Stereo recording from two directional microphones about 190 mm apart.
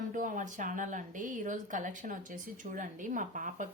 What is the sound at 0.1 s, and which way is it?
Speech, 45° right (ahead or behind).